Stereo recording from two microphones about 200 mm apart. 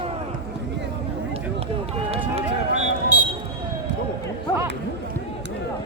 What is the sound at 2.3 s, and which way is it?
Music, 35° right (ahead or behind).